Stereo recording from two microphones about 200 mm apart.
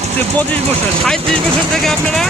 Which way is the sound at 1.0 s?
5° left (ahead or behind).